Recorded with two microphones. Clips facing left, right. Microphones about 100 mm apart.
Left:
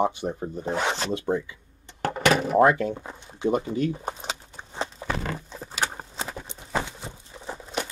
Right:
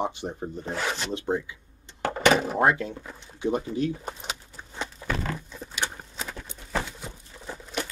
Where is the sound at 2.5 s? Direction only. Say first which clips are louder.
Left 4 dB; 50° left (ahead or behind).